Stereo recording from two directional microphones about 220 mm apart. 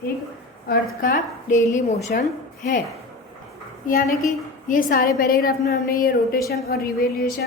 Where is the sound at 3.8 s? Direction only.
35° left (ahead or behind).